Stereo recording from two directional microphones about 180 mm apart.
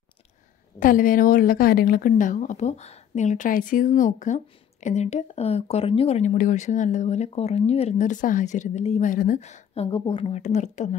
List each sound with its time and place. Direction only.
0.7 s a woman's voice: 50° left (ahead or behind)